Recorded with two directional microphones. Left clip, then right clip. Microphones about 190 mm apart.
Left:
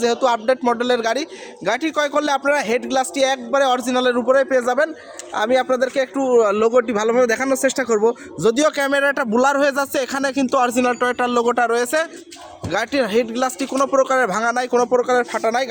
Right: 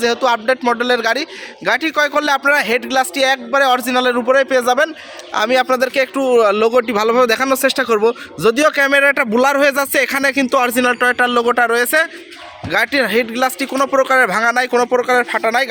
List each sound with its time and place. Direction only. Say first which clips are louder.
0.0 s a man's voice: right 2 dB; 10° right (ahead or behind)
7.8 s speech: right 3 dB; 30° right (ahead or behind)
8.4 s a man's voice: right 5 dB; 15° right (ahead or behind)